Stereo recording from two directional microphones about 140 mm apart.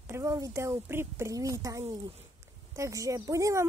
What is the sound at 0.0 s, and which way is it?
Speech, 20° right (ahead or behind).